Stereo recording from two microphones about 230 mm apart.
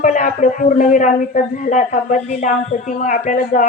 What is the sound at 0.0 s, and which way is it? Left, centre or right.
Speech, left.